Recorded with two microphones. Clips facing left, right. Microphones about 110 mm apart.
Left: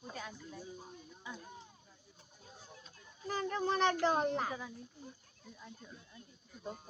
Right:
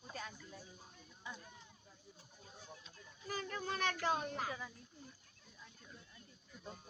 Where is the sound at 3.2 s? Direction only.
25° left (ahead or behind).